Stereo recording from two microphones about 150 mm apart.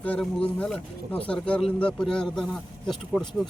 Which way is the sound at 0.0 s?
10° left (ahead or behind).